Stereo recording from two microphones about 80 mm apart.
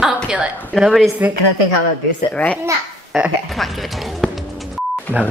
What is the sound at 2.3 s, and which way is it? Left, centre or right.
Speech, centre.